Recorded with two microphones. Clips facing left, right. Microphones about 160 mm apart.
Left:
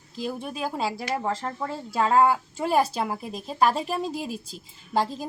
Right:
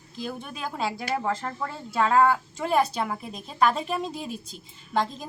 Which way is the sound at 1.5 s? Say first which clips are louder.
Left 1 dB; 20° left (ahead or behind).